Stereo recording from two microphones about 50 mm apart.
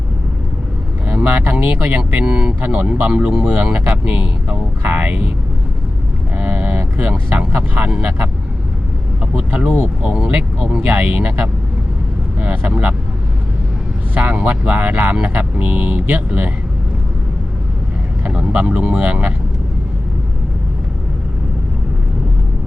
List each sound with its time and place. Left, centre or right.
1.0 s speech: right
2.2 s speech: centre
6.3 s a sound: right
7.1 s speech: right
9.4 s speech: right
10.0 s speech: centre
14.3 s speech: right
18.3 s speech: right